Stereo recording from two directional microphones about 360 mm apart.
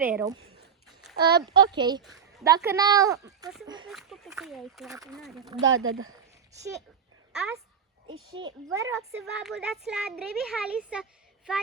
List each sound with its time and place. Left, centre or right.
0.0 s speech: centre
0.3 s a child's voice: right
1.7 s speech: centre
5.6 s speech: right
7.3 s speech: centre